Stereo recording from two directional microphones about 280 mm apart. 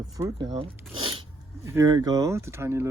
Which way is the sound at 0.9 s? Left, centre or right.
Right.